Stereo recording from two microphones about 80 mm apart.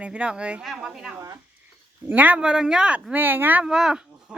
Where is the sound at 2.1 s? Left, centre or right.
Centre.